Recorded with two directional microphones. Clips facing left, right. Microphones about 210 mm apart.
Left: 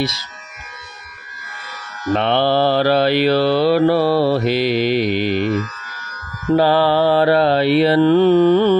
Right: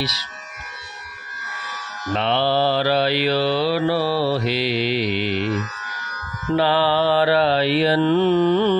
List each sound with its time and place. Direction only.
0.0 s mantra: 50° left (ahead or behind)
2.1 s mantra: 55° left (ahead or behind)
6.5 s mantra: 45° left (ahead or behind)